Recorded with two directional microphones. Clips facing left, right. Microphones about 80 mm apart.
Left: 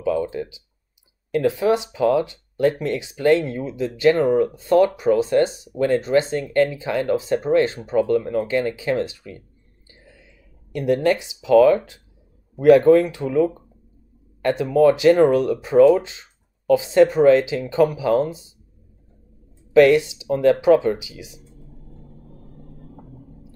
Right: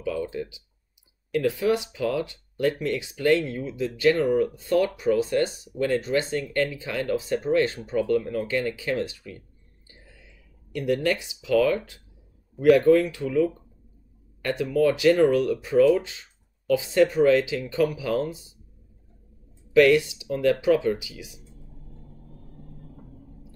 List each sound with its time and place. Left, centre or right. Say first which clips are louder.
0.0 s speech: left 6 dB; left
10.7 s speech: left 5 dB; left
19.7 s speech: left 4 dB; left
22.3 s vehicle: left 3 dB; left